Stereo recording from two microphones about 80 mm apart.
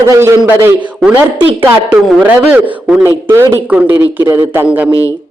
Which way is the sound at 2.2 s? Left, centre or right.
Right.